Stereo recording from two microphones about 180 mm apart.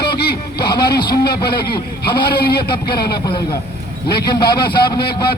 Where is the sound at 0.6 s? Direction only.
25° left (ahead or behind).